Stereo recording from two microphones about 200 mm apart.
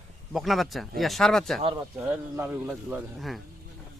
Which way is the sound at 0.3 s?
Centre (ahead or behind).